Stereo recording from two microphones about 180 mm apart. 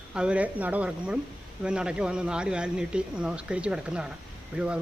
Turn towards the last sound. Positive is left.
turn(degrees=-5)  # may be behind; listen again after turning